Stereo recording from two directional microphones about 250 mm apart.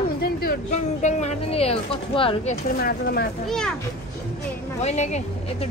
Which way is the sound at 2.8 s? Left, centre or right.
Left.